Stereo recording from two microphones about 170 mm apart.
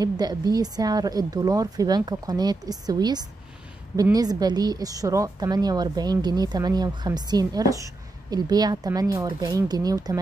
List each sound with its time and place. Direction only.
0.0 s speech: 25° right (ahead or behind)